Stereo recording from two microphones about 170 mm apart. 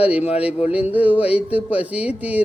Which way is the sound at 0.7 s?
10° right (ahead or behind).